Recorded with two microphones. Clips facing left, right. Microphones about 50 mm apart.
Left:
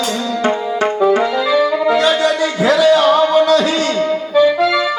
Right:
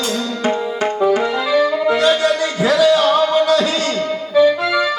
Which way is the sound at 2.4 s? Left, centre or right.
Centre.